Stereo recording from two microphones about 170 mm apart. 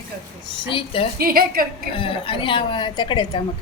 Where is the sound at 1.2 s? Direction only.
60° right (ahead or behind).